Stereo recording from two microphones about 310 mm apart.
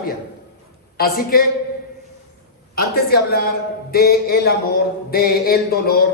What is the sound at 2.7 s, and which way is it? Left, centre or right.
Mantra, left.